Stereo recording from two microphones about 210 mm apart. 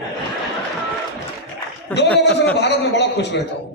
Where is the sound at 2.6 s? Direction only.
55° left (ahead or behind).